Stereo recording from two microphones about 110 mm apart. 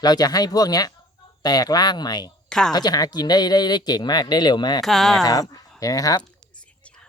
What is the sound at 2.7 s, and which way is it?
Speech, 35° left (ahead or behind).